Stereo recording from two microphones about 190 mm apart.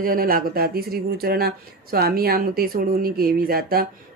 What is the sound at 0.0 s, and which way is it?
Speech, 50° right (ahead or behind).